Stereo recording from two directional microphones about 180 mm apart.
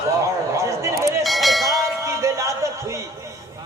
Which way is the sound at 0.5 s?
15° right (ahead or behind).